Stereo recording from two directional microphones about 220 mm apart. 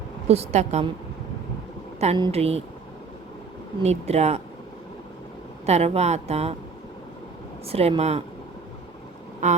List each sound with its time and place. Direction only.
0.3 s a woman's voice: 30° right (ahead or behind)
2.0 s a woman's voice: 25° right (ahead or behind)
3.8 s a woman's voice: 30° right (ahead or behind)
5.6 s a woman's voice: 30° right (ahead or behind)
7.7 s a woman's voice: 25° right (ahead or behind)
9.4 s a sound: 30° right (ahead or behind)